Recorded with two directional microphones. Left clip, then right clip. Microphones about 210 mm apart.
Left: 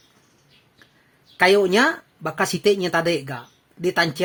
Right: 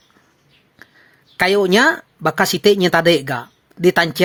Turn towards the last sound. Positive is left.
turn(degrees=-30)  # may be behind; listen again after turning